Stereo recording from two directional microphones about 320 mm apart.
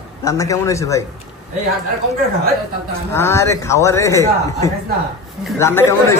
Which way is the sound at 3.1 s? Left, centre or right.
Centre.